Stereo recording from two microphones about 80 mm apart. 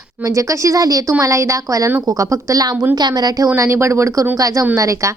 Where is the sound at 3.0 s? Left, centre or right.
Right.